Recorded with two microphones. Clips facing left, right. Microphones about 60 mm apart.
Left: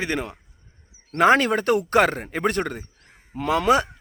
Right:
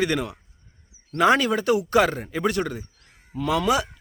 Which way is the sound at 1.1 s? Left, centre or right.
Left.